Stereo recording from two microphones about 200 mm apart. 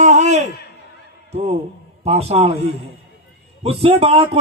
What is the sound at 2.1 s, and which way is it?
Speech, 30° right (ahead or behind).